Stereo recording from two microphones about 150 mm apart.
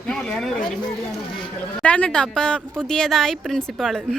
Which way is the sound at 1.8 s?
10° left (ahead or behind).